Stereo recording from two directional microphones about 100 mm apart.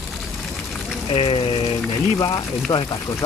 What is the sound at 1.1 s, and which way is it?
Water, 70° left (ahead or behind).